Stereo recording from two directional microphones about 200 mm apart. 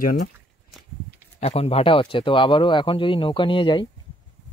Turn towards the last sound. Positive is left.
turn(degrees=25)  # may be behind; listen again after turning